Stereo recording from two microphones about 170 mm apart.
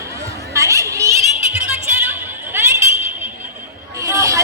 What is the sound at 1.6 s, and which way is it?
Music, 10° right (ahead or behind).